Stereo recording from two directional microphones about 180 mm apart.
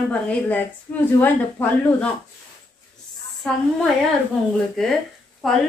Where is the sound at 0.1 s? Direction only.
5° left (ahead or behind).